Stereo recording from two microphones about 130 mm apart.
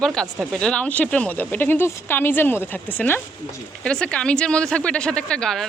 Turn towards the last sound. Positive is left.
turn(degrees=5)  # may be behind; listen again after turning